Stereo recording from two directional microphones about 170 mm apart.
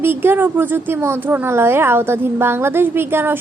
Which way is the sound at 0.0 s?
15° right (ahead or behind).